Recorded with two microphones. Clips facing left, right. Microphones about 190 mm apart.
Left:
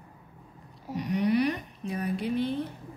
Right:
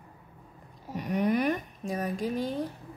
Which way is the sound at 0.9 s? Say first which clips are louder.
Left 1 dB; 50° right (ahead or behind).